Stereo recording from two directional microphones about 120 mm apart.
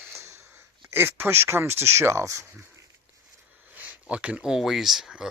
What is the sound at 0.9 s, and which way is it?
Speech, 20° right (ahead or behind).